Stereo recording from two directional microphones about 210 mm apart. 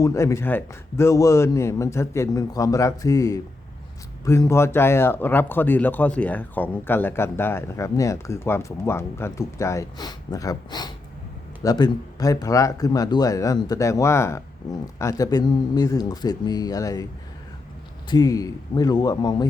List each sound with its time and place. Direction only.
0.0 s speech: 15° left (ahead or behind)
18.1 s speech: 15° left (ahead or behind)